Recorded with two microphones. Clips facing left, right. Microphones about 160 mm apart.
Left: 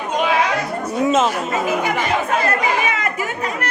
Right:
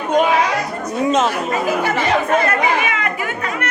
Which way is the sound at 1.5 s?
20° left (ahead or behind).